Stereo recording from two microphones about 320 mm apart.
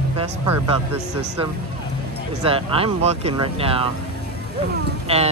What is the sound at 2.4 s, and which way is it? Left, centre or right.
Speech, centre.